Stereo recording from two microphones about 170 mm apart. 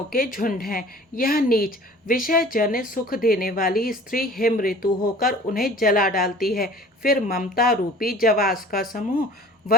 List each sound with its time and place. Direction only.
0.1 s a woman's voice: 55° left (ahead or behind)